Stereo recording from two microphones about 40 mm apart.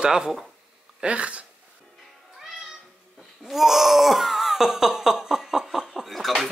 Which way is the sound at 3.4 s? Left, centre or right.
Centre.